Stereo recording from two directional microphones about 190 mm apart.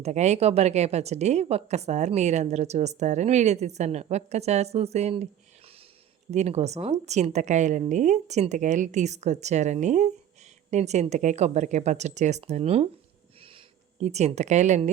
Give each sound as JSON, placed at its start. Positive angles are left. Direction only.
{"t": 0.0, "sound": "a woman's voice", "side_deg": -35}
{"t": 6.3, "sound": "a woman's voice", "side_deg": -35}
{"t": 14.0, "sound": "a woman's voice", "side_deg": -35}